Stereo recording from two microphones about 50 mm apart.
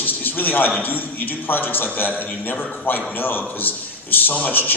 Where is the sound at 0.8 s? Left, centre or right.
Left.